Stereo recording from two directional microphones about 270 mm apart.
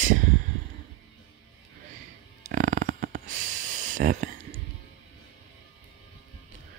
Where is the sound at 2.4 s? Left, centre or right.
Right.